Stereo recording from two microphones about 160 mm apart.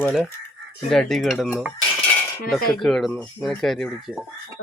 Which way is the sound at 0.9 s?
Centre (ahead or behind).